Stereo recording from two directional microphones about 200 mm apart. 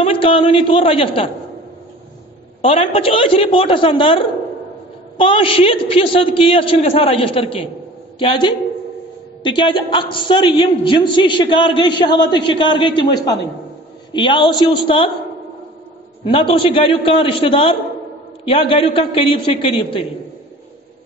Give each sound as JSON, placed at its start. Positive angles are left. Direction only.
{"t": 0.0, "sound": "a woman's voice", "side_deg": 25}
{"t": 2.6, "sound": "a woman's voice", "side_deg": 30}
{"t": 16.3, "sound": "a woman's voice", "side_deg": 25}